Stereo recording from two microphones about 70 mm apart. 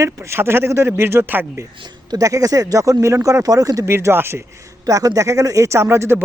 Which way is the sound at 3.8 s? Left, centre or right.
Right.